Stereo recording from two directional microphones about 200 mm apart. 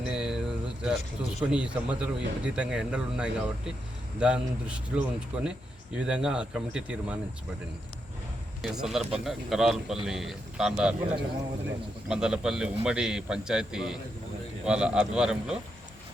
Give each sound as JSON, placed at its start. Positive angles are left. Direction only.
{"t": 0.0, "sound": "a man's voice", "side_deg": -5}
{"t": 8.6, "sound": "a man's voice", "side_deg": 0}